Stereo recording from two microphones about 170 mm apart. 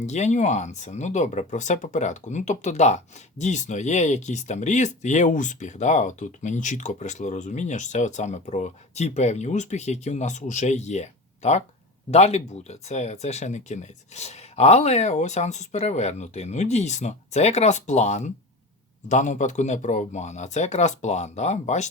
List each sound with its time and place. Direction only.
0.0 s speech: 40° left (ahead or behind)